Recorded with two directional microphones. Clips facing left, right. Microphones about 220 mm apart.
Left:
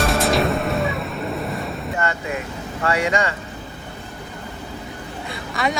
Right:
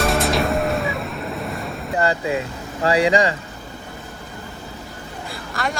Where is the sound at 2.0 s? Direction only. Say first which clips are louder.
Right 6 dB; 30° right (ahead or behind).